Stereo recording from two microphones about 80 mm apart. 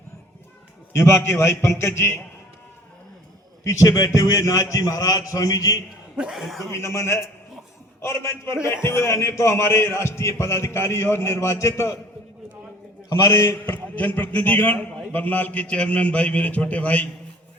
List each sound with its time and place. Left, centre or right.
0.9 s a man's voice: left
3.6 s a man's voice: left
6.1 s speech: centre
6.6 s a man's voice: left
13.1 s a man's voice: left
13.7 s a man's voice: centre